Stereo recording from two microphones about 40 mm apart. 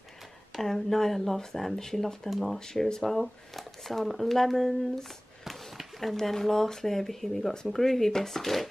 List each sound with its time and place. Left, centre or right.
0.6 s speech: centre
2.2 s speech: centre
2.6 s speech: centre
5.4 s a sound: centre
5.9 s speech: centre